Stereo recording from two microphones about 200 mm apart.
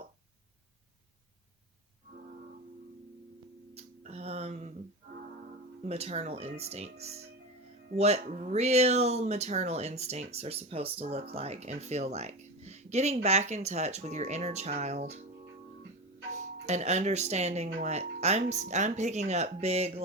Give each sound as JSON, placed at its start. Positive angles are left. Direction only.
{"t": 3.8, "sound": "a sound", "side_deg": -30}
{"t": 5.8, "sound": "speech", "side_deg": -30}
{"t": 16.3, "sound": "speech", "side_deg": -35}